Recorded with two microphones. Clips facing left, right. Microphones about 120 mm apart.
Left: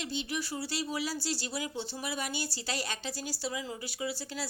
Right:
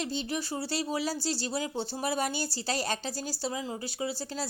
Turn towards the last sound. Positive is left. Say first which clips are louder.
# right 3 dB
turn(degrees=-30)  # may be behind; listen again after turning